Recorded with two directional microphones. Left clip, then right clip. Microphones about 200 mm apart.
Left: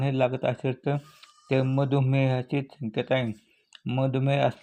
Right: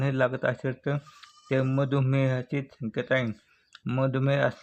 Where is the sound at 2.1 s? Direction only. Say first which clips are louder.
Left 1 dB; 30° right (ahead or behind).